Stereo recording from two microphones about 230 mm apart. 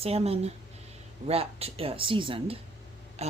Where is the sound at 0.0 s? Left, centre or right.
Right.